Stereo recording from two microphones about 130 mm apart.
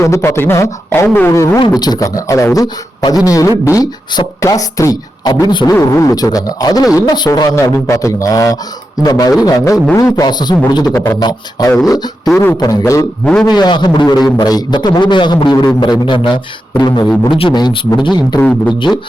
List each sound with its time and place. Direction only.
0.0 s speech: 20° left (ahead or behind)
5.3 s a man's voice: 35° left (ahead or behind)
18.3 s a man's voice: 10° left (ahead or behind)